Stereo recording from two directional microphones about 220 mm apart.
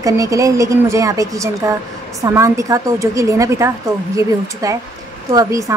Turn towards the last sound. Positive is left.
turn(degrees=-15)  # may be behind; listen again after turning